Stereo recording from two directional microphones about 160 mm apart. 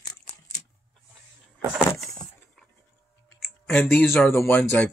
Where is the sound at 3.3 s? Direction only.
Centre (ahead or behind).